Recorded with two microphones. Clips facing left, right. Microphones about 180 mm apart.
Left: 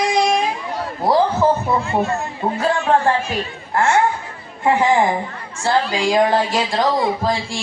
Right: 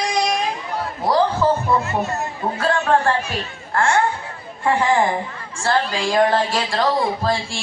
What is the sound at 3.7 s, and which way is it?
Speech, 20° left (ahead or behind).